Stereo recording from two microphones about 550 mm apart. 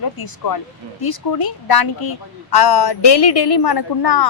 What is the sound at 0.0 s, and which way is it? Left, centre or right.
A woman's voice, left.